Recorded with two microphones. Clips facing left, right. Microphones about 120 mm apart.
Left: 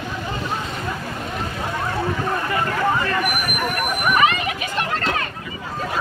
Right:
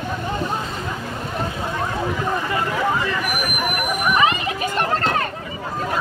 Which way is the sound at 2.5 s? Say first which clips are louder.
Left 2 dB; 10° right (ahead or behind).